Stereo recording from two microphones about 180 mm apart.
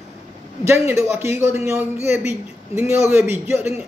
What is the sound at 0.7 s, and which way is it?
A man's voice, 15° right (ahead or behind).